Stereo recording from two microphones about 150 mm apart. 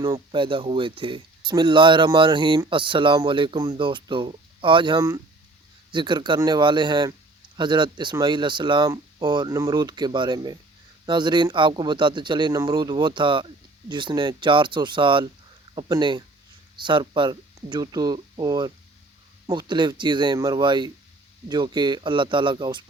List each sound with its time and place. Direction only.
0.0 s speech: 35° right (ahead or behind)